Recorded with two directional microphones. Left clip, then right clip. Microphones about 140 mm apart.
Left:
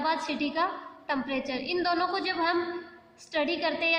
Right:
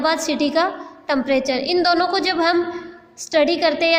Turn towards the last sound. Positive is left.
turn(degrees=-40)  # may be behind; listen again after turning